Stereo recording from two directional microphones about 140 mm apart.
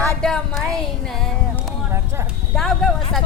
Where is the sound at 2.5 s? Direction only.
5° left (ahead or behind).